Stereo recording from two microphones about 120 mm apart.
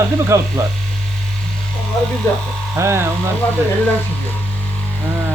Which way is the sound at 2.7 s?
20° right (ahead or behind).